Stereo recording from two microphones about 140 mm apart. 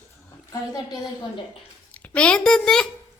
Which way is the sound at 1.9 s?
10° left (ahead or behind).